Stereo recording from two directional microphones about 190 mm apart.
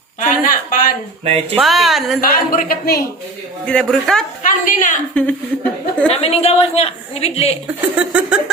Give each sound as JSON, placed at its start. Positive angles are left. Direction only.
{"t": 0.2, "sound": "speech", "side_deg": 45}
{"t": 1.2, "sound": "speech", "side_deg": -30}
{"t": 1.5, "sound": "speech", "side_deg": 0}
{"t": 2.2, "sound": "speech", "side_deg": 50}
{"t": 3.7, "sound": "speech", "side_deg": 5}
{"t": 4.4, "sound": "speech", "side_deg": 45}
{"t": 5.2, "sound": "speech", "side_deg": 5}
{"t": 6.1, "sound": "a woman's voice", "side_deg": 30}
{"t": 7.8, "sound": "speech", "side_deg": -5}